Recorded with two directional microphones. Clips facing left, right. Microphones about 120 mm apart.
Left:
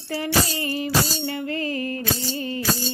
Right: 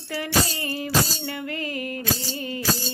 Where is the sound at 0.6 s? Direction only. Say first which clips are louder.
Left 1 dB; 25° left (ahead or behind).